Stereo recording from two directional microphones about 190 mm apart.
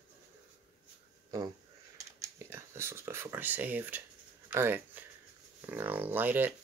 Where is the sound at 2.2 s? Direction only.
15° right (ahead or behind).